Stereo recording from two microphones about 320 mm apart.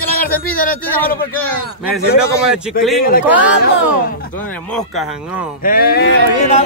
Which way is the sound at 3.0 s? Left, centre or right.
Left.